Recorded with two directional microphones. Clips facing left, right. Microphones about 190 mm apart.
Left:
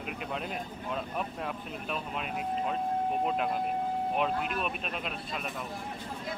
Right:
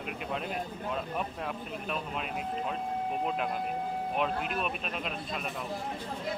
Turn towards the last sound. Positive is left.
turn(degrees=0)  # may be behind; listen again after turning